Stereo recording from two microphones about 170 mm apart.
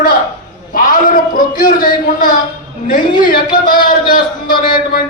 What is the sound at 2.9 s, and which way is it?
A man's voice, 60° left (ahead or behind).